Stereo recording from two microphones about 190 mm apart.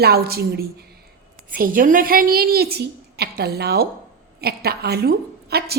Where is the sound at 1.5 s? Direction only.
45° right (ahead or behind).